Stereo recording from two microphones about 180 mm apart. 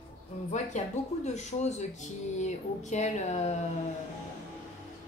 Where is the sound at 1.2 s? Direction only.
40° left (ahead or behind).